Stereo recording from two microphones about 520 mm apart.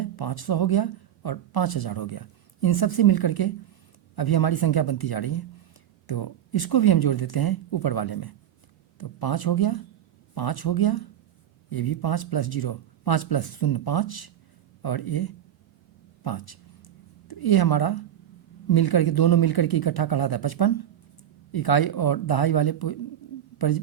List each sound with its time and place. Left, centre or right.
0.0 s a woman's voice: left